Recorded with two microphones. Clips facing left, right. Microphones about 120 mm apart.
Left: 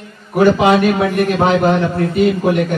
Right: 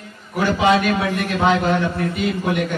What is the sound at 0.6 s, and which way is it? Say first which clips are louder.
A man's voice: left 4 dB; 45° left (ahead or behind).